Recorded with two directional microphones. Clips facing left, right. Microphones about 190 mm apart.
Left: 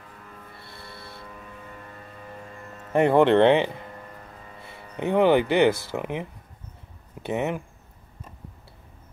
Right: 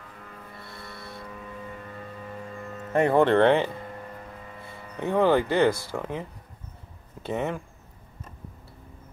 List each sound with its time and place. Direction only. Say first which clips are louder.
0.6 s music: right 3 dB; 25° left (ahead or behind)
2.9 s speech: left 2 dB; 10° left (ahead or behind)
3.3 s speech: left 2 dB; 20° left (ahead or behind)
5.0 s speech: left 2 dB; 20° left (ahead or behind)
7.2 s speech: left 2 dB; 20° left (ahead or behind)